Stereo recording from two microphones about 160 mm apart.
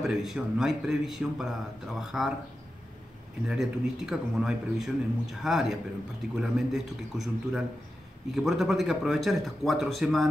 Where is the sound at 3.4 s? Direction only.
5° right (ahead or behind).